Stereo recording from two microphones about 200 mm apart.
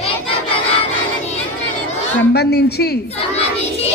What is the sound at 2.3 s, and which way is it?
Speech, 55° left (ahead or behind).